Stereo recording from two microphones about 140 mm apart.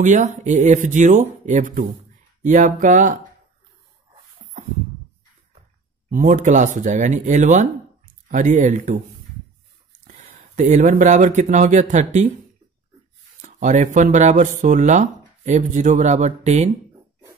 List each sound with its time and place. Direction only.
0.0 s speech: 60° right (ahead or behind)
6.0 s speech: 65° right (ahead or behind)
10.2 s speech: 60° right (ahead or behind)
13.4 s speech: 60° right (ahead or behind)